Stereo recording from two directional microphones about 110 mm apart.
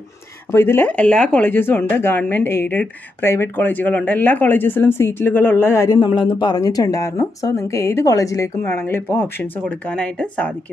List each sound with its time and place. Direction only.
0.5 s speech: 20° left (ahead or behind)
5.9 s speech: 45° left (ahead or behind); by 10.5 s 10° left (ahead or behind)